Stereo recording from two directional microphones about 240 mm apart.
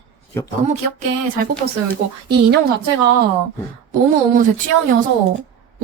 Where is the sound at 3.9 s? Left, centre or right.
Right.